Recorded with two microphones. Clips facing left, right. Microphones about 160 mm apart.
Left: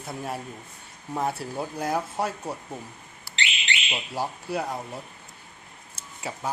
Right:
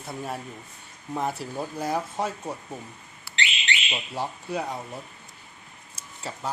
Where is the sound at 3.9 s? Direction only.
5° left (ahead or behind).